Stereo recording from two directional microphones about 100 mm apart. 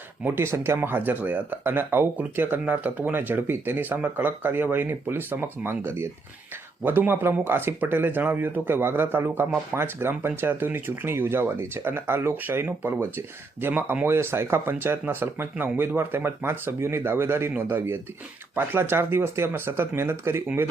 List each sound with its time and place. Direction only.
0.3 s speech: 25° right (ahead or behind)